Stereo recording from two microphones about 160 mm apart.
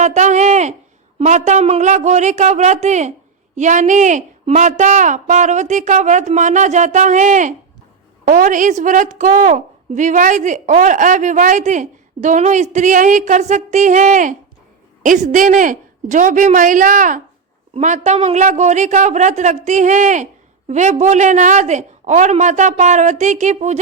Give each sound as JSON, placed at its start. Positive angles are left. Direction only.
{"t": 0.0, "sound": "a woman's voice", "side_deg": -50}